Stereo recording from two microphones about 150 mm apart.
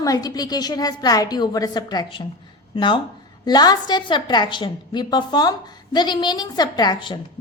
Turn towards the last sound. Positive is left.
turn(degrees=30)  # may be behind; listen again after turning